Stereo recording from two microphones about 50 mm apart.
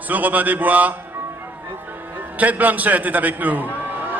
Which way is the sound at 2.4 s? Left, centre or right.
Right.